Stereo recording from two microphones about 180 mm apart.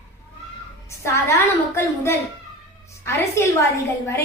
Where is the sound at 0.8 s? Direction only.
15° left (ahead or behind).